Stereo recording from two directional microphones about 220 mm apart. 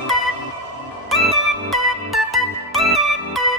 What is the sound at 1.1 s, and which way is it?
Music, centre (ahead or behind).